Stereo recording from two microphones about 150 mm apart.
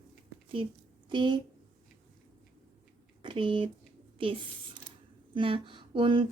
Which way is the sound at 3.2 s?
35° right (ahead or behind).